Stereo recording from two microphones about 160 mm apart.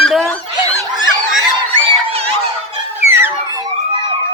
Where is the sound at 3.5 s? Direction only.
30° right (ahead or behind).